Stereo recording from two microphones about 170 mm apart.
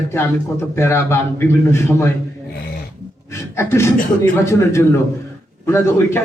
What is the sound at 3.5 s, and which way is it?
Speech, 15° left (ahead or behind).